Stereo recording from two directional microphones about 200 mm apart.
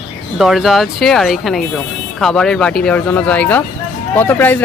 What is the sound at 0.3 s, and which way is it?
Speech, centre (ahead or behind).